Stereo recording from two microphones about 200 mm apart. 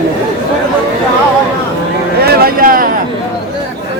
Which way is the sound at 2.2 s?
45° right (ahead or behind).